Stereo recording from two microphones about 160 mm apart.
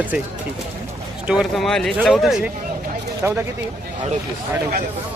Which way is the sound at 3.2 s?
15° right (ahead or behind).